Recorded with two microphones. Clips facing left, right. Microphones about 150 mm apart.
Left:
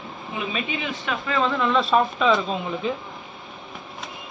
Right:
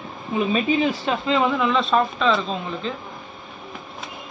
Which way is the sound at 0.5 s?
35° right (ahead or behind).